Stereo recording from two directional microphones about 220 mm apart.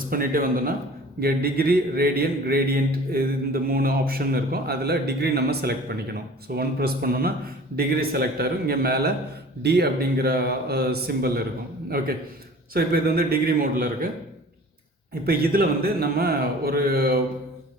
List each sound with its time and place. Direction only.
0.1 s a man's voice: 40° right (ahead or behind)
15.3 s speech: 45° right (ahead or behind)